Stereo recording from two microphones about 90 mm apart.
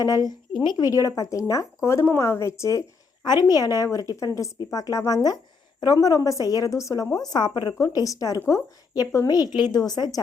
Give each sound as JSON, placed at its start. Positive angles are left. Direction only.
{"t": 0.0, "sound": "a woman's voice", "side_deg": 45}
{"t": 3.2, "sound": "a woman's voice", "side_deg": 50}
{"t": 7.3, "sound": "speech", "side_deg": 55}
{"t": 7.7, "sound": "a woman's voice", "side_deg": 40}